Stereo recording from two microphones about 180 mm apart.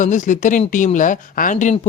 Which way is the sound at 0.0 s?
45° left (ahead or behind).